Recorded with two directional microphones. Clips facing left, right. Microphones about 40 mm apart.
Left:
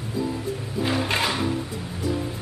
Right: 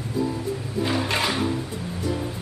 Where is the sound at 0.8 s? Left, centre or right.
Centre.